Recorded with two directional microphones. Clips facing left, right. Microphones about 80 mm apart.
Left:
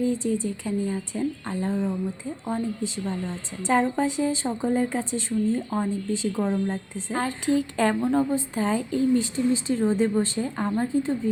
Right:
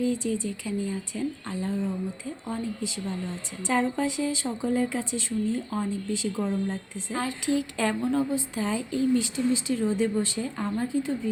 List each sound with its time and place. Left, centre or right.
0.0 s a woman's voice: left